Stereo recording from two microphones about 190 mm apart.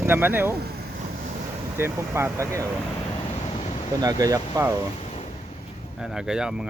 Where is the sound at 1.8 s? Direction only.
15° right (ahead or behind).